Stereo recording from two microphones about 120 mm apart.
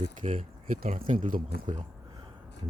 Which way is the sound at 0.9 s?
80° right.